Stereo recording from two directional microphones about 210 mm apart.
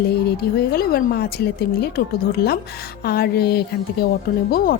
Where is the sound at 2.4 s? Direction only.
50° left (ahead or behind).